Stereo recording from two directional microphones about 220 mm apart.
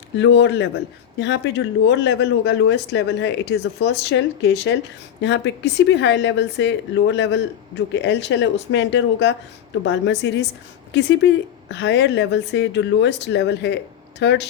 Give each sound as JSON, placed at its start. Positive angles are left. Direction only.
{"t": 0.2, "sound": "speech", "side_deg": 55}